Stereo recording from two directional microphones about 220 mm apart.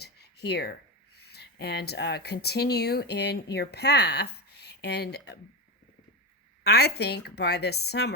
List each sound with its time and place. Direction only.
0.0 s speech: 45° left (ahead or behind)
6.7 s a woman's voice: 45° left (ahead or behind)